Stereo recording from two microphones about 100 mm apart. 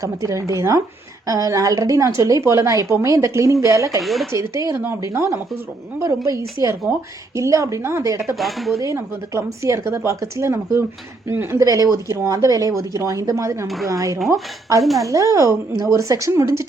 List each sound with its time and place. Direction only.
0.0 s speech: 30° right (ahead or behind)
4.0 s speech: centre (ahead or behind)
4.3 s speech: 30° right (ahead or behind)
6.8 s speech: 15° right (ahead or behind)
7.3 s speech: 30° right (ahead or behind)
8.4 s speech: centre (ahead or behind)
8.8 s speech: 30° right (ahead or behind)
14.8 s speech: centre (ahead or behind)
15.0 s speech: 35° right (ahead or behind)